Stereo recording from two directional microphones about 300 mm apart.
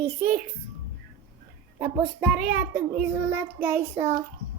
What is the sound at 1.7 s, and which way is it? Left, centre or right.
Child singing, centre.